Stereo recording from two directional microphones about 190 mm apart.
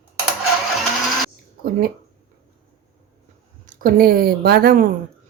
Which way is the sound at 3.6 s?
50° right (ahead or behind).